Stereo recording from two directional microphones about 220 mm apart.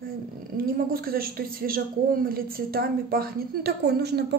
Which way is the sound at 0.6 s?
40° right (ahead or behind).